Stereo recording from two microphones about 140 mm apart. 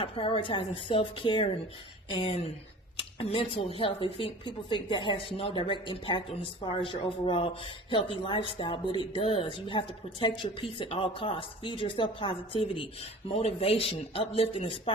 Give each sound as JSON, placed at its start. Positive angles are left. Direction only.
{"t": 0.0, "sound": "a woman's voice", "side_deg": 40}